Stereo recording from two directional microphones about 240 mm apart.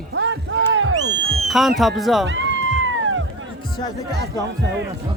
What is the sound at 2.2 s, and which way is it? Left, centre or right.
Cat, right.